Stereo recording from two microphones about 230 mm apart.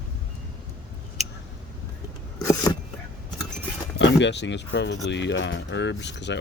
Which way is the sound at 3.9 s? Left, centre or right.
Left.